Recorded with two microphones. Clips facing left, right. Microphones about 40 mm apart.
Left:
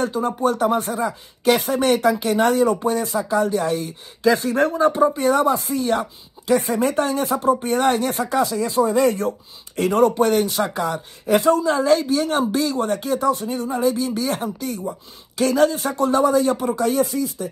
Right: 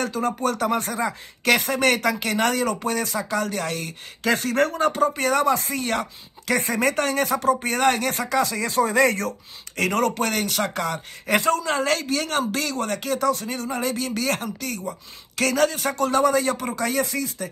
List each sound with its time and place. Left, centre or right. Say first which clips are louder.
0.0 s speech: left 3 dB; right